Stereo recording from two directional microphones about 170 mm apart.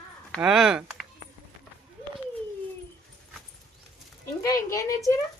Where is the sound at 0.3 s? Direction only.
5° right (ahead or behind).